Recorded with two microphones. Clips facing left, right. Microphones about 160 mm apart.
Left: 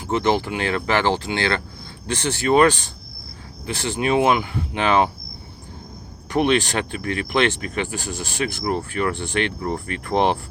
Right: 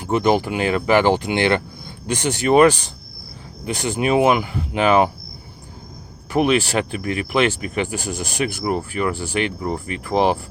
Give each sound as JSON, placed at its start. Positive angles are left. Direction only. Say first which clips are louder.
{"t": 0.1, "sound": "speech", "louder": "right 3 dB", "side_deg": -15}
{"t": 6.3, "sound": "speech", "louder": "right 2 dB", "side_deg": -5}